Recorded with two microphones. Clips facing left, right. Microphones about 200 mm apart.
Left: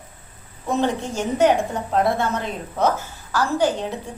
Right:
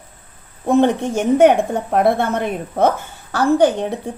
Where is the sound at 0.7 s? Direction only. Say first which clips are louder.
Right 7 dB; 60° right (ahead or behind).